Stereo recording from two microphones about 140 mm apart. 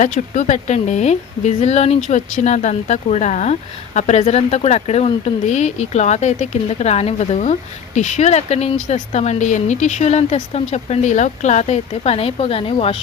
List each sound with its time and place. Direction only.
0.0 s a woman's voice: 60° left (ahead or behind); by 13.0 s 45° left (ahead or behind)